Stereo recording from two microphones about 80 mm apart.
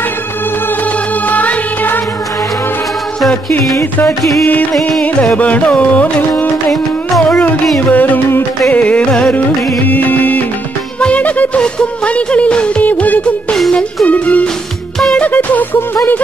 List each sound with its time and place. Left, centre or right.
1.3 s music: centre
4.2 s music: centre
5.2 s music: centre
6.7 s music: centre
7.9 s music: left
8.7 s music: centre
13.6 s music: centre
14.0 s music: centre